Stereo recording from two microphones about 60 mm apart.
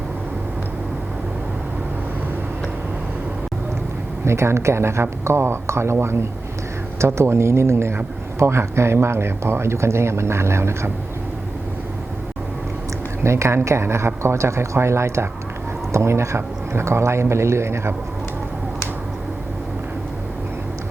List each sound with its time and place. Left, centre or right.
4.3 s speech: right
13.2 s speech: right